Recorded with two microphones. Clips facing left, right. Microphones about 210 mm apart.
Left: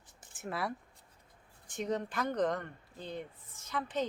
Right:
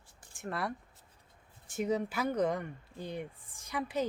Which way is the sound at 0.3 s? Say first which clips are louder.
Right 1 dB; centre (ahead or behind).